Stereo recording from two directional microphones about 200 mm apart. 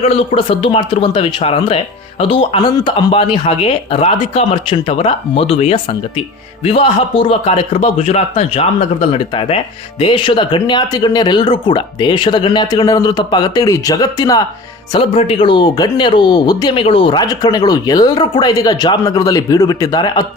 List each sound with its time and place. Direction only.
0.0 s speech: 30° left (ahead or behind)